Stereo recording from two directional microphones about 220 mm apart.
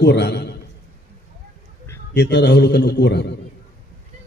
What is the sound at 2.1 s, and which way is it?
A man's voice, 50° left (ahead or behind).